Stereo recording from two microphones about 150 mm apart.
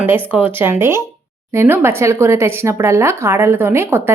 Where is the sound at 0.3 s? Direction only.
10° right (ahead or behind).